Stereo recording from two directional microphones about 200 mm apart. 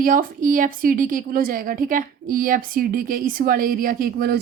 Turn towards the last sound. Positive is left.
turn(degrees=-45)  # may be behind; listen again after turning